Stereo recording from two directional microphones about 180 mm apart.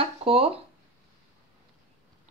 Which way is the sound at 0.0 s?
30° right (ahead or behind).